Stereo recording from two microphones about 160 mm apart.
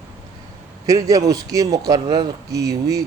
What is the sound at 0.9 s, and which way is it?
Speech, 20° right (ahead or behind).